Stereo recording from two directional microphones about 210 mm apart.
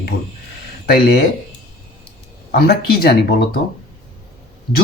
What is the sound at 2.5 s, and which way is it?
Speech, 50° left (ahead or behind).